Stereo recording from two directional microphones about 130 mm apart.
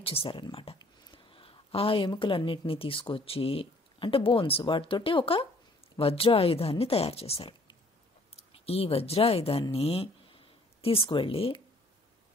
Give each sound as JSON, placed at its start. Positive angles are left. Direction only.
{"t": 0.0, "sound": "speech", "side_deg": 45}